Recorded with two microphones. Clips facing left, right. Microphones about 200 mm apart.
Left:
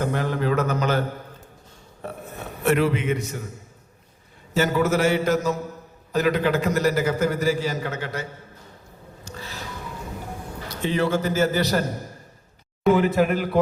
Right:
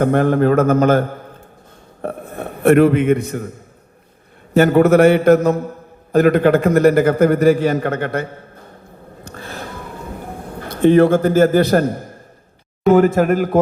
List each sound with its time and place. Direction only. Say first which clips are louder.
0.0 s a man's voice: right 10 dB; 55° right (ahead or behind)
4.5 s a man's voice: right 10 dB; 60° right (ahead or behind)
9.2 s a sound: right 5 dB; 55° right (ahead or behind)
10.5 s a man's voice: right 15 dB; 55° right (ahead or behind)
12.9 s a man's voice: right 7 dB; 45° right (ahead or behind)